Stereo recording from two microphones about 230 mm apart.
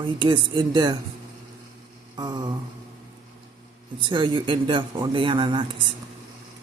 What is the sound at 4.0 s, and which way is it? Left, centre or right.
Speech, right.